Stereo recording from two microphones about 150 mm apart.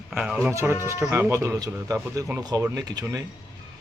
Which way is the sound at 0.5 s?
15° right (ahead or behind).